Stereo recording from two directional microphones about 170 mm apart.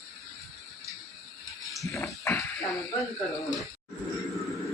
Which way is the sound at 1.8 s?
20° left (ahead or behind).